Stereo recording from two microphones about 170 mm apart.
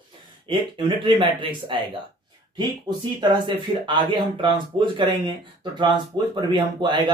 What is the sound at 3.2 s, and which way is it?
Speech, 25° right (ahead or behind).